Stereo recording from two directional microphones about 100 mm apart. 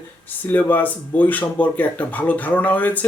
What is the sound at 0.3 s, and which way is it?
Speech, 20° left (ahead or behind).